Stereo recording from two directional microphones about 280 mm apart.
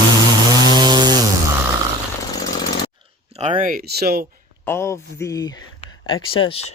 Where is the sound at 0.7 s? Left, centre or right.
Centre.